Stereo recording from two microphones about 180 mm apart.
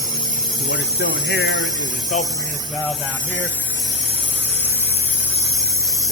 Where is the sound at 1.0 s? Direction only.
65° left (ahead or behind).